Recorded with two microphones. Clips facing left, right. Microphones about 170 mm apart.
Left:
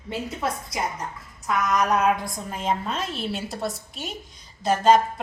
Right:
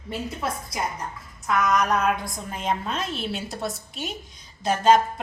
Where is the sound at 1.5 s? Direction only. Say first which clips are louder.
Even; 5° left (ahead or behind).